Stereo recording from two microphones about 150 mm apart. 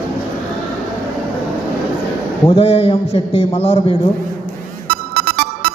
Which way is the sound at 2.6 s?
40° left (ahead or behind).